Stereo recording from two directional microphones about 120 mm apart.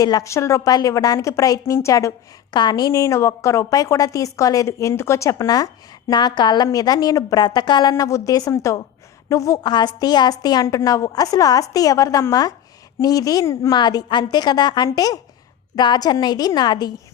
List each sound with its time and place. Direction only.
0.0 s a woman's voice: 30° left (ahead or behind)
9.6 s a woman's voice: 35° left (ahead or behind)
13.7 s a woman's voice: 40° left (ahead or behind)